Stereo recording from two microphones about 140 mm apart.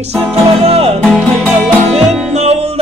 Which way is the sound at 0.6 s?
45° right (ahead or behind).